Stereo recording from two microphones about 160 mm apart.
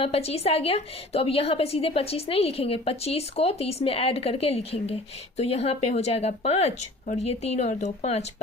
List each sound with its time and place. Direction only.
0.0 s a woman's voice: 40° left (ahead or behind)